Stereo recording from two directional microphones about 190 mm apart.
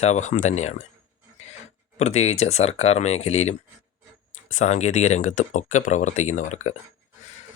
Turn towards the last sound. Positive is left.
turn(degrees=40)  # may be behind; listen again after turning